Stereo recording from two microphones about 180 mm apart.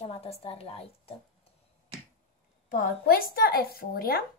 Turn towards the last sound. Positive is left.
turn(degrees=55)  # may be behind; listen again after turning